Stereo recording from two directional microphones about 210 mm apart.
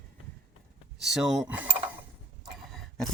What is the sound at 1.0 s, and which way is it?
Speech, centre (ahead or behind).